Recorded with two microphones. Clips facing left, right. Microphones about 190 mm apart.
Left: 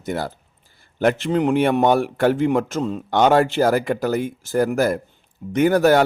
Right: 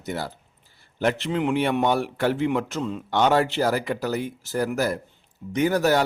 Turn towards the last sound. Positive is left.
turn(degrees=55)  # may be behind; listen again after turning